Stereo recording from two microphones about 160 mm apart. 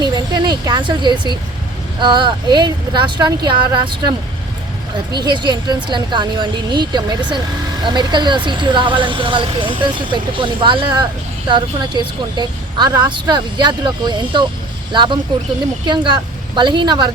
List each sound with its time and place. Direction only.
0.0 s a sound: 25° right (ahead or behind)
2.0 s speech: 30° right (ahead or behind)
5.1 s speech: 25° right (ahead or behind)